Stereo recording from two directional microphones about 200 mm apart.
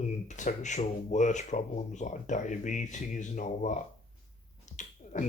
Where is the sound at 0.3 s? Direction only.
35° left (ahead or behind).